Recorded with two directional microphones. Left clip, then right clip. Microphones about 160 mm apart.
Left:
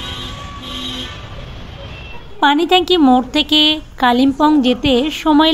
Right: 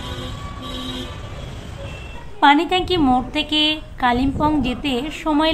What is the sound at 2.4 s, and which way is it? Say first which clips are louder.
A woman's voice: left 2 dB; 40° left (ahead or behind).